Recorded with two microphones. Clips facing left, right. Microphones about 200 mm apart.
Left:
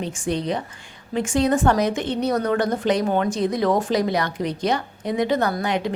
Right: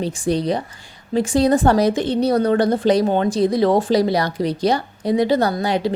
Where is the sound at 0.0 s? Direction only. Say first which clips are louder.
Right 5 dB; 35° right (ahead or behind).